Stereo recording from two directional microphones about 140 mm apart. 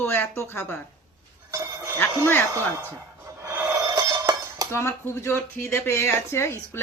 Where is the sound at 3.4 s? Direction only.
20° right (ahead or behind).